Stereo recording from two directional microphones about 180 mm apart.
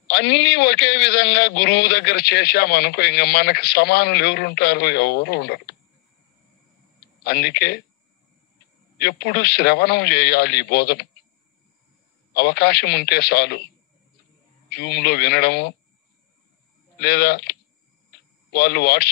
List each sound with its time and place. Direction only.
0.1 s a man's voice: 70° left (ahead or behind)
7.0 s speech: 65° left (ahead or behind)
8.9 s a man's voice: 65° left (ahead or behind)
12.4 s a man's voice: 65° left (ahead or behind)
14.7 s a man's voice: 65° left (ahead or behind)
17.0 s a man's voice: 65° left (ahead or behind)